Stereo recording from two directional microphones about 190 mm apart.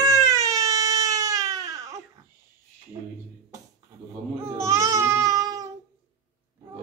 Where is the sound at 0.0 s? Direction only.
15° right (ahead or behind).